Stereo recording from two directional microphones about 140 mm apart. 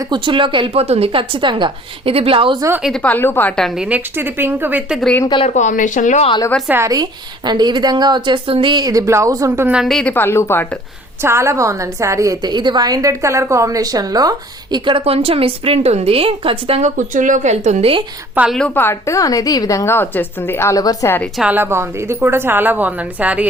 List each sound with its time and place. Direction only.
0.0 s a woman's voice: 35° right (ahead or behind)
2.6 s a woman's voice: 20° right (ahead or behind)
2.8 s a woman's voice: 5° left (ahead or behind)
3.8 s a woman's voice: 15° right (ahead or behind)
5.5 s speech: 65° left (ahead or behind)
6.7 s a woman's voice: 20° right (ahead or behind)
9.8 s a woman's voice: centre (ahead or behind)
10.1 s a woman's voice: 15° left (ahead or behind)
11.2 s a woman's voice: 20° right (ahead or behind); by 16.9 s 45° right (ahead or behind)
17.0 s speech: 65° right (ahead or behind); by 18.0 s 45° right (ahead or behind)
18.5 s a woman's voice: 10° left (ahead or behind)
21.3 s a woman's voice: 10° right (ahead or behind)